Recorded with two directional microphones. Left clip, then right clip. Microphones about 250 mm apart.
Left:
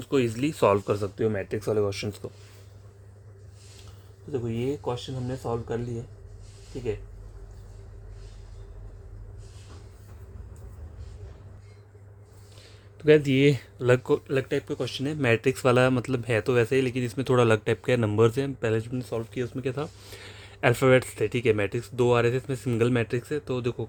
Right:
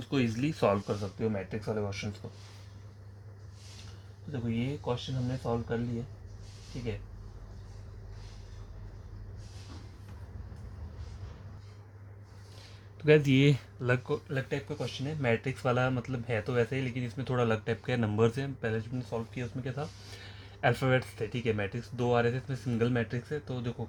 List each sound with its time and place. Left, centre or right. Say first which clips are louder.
0.0 s speech: left 6 dB; left
1.2 s speech: left 7 dB; left
5.4 s speech: left 3 dB; left
13.0 s speech: left 5 dB; centre
14.0 s speech: left 9 dB; left